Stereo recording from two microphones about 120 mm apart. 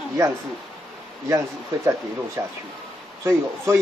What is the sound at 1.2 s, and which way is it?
Speech, 25° right (ahead or behind).